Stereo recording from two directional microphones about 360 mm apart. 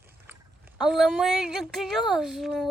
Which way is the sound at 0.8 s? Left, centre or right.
Centre.